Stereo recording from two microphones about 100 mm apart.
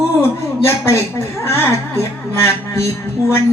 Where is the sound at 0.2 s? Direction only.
25° left (ahead or behind).